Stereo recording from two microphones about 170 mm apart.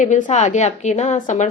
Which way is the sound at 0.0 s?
45° left (ahead or behind).